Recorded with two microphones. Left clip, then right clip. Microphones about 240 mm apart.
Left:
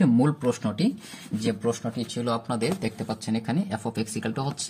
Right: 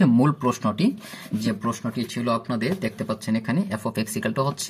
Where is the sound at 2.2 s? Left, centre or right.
Centre.